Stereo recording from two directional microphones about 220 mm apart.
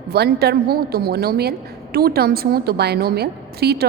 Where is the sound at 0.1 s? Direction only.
45° right (ahead or behind).